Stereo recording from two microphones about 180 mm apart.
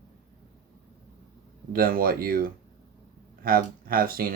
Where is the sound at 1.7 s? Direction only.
55° right (ahead or behind).